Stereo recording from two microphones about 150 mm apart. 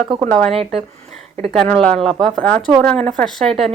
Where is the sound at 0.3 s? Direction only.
5° left (ahead or behind).